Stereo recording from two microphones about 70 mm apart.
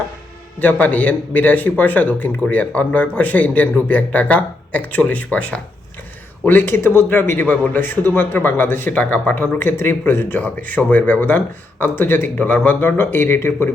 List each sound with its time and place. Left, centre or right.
0.6 s a man's voice: left